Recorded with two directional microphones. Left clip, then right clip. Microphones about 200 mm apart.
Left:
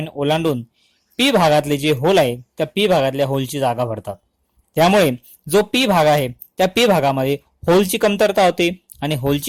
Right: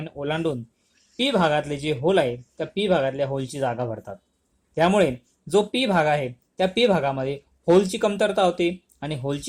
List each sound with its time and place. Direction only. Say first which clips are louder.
0.0 s speech: left 8 dB; 45° left (ahead or behind)